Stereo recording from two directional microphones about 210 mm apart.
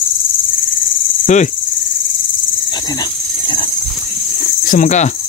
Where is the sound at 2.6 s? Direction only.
20° left (ahead or behind).